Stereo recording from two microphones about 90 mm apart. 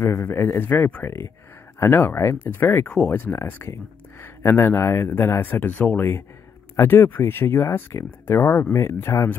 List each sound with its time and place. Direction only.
0.0 s speech: 30° left (ahead or behind)